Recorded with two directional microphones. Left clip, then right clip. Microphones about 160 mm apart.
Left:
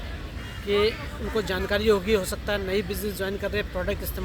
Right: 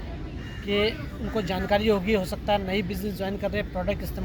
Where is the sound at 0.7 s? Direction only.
20° left (ahead or behind).